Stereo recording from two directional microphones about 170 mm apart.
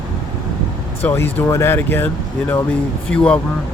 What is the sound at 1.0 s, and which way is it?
Speech, 15° left (ahead or behind).